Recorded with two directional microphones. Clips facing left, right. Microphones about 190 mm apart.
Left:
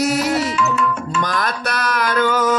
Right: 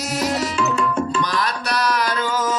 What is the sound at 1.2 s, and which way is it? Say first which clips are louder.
Tabla: left 1 dB; 50° left (ahead or behind).